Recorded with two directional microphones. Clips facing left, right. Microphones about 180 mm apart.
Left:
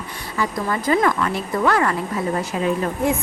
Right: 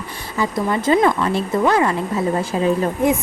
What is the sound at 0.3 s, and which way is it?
A woman's voice, 25° right (ahead or behind).